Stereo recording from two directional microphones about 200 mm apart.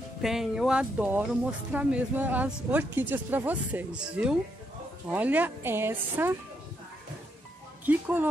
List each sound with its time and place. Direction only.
0.2 s a woman's voice: centre (ahead or behind)
7.8 s a woman's voice: 10° right (ahead or behind)